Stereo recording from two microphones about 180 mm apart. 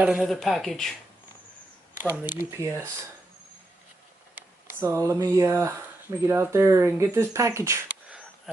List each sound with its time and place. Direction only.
0.0 s speech: 5° right (ahead or behind)
2.0 s speech: 10° right (ahead or behind)
4.6 s speech: 15° right (ahead or behind)